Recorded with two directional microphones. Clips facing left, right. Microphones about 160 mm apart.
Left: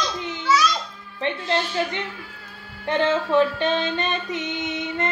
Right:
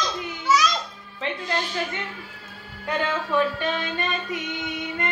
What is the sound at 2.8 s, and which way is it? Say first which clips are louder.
Music: left 5 dB; 25° left (ahead or behind).